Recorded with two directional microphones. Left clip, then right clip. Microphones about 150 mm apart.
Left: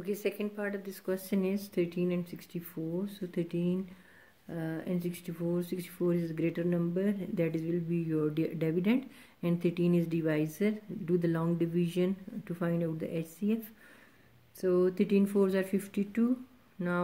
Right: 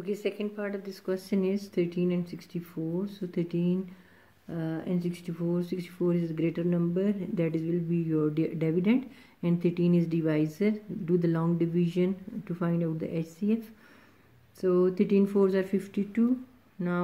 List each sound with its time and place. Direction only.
0.0 s speech: 20° left (ahead or behind)
14.6 s speech: 10° left (ahead or behind)